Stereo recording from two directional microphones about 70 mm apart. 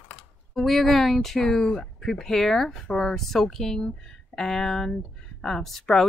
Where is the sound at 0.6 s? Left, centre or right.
Centre.